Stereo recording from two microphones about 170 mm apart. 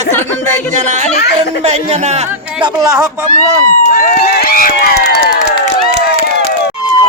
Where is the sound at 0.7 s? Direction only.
45° right (ahead or behind).